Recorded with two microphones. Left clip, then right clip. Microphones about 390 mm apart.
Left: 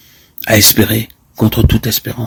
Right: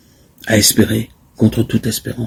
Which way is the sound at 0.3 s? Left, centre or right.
Left.